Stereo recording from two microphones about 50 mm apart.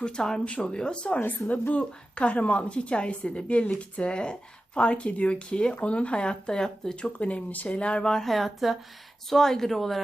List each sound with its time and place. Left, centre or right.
0.0 s a woman's voice: centre
1.4 s speech: left
1.8 s a woman's voice: left
7.0 s a woman's voice: left
8.0 s speech: centre
8.3 s a woman's voice: centre